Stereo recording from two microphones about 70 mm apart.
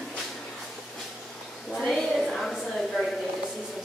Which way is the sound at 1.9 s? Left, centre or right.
Centre.